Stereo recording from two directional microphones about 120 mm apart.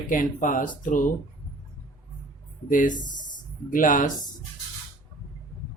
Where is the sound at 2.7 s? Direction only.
90° left.